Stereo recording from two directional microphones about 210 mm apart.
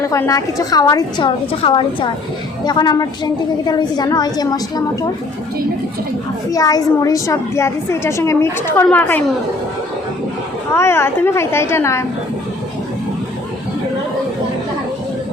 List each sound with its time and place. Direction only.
0.0 s a woman's voice: 15° left (ahead or behind)
6.5 s a woman's voice: 15° left (ahead or behind)
10.8 s a woman's voice: 10° left (ahead or behind)